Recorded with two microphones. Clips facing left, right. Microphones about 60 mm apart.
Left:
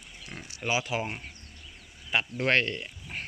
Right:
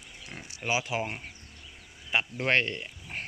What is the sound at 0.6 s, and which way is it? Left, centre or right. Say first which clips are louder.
Speech: even; right.